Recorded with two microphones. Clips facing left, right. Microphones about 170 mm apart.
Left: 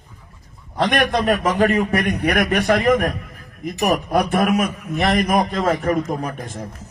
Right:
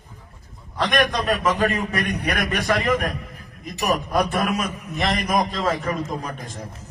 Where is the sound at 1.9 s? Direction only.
65° left (ahead or behind).